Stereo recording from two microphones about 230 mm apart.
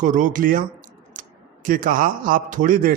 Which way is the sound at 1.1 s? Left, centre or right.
Right.